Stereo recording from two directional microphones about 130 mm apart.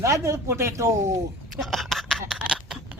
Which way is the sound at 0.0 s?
20° right (ahead or behind).